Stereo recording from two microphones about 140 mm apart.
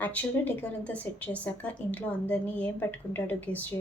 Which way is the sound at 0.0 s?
10° left (ahead or behind).